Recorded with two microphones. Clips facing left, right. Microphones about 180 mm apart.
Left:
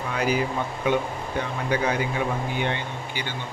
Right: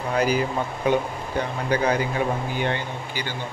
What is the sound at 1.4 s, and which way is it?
Speech, 40° right (ahead or behind).